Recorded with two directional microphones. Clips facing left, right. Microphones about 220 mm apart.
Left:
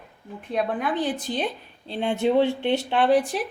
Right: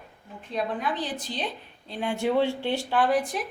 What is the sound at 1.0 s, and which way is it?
Speech, 55° left (ahead or behind).